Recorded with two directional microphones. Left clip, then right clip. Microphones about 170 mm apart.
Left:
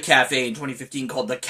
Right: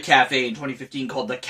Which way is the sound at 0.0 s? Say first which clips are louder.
Right 1 dB; 25° left (ahead or behind).